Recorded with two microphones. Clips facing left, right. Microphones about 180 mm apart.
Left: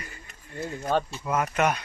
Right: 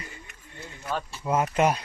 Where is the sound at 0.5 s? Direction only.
40° left (ahead or behind).